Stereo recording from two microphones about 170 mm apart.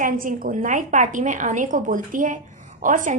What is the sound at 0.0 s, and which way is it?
A woman's voice, 55° right (ahead or behind).